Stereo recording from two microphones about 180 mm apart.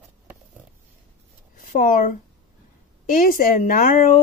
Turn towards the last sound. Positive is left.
turn(degrees=50)  # may be behind; listen again after turning